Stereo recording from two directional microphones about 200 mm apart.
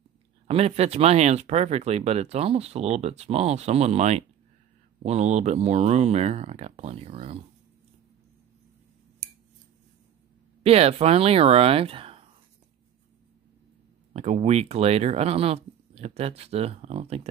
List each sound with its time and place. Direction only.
0.5 s speech: 30° right (ahead or behind)
10.6 s speech: 30° right (ahead or behind)
14.1 s speech: 35° right (ahead or behind)